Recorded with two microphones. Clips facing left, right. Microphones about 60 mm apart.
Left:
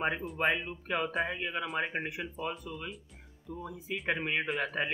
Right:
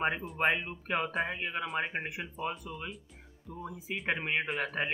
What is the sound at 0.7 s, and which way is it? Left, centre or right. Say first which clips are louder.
Speech: even; centre.